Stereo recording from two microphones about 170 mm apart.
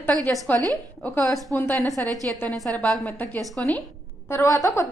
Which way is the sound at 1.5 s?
15° left (ahead or behind).